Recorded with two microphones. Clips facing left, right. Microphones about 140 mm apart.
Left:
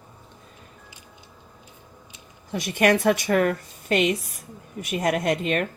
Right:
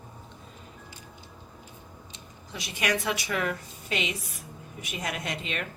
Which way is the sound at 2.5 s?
50° left (ahead or behind).